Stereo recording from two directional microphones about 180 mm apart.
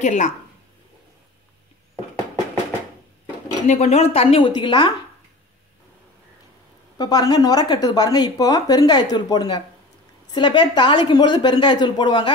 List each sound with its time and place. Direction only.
0.0 s a woman's voice: 40° left (ahead or behind)
3.6 s a woman's voice: 40° left (ahead or behind)
7.0 s a woman's voice: 20° left (ahead or behind)